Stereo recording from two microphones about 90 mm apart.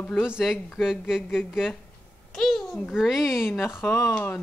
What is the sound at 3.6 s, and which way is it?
Speech, 25° left (ahead or behind).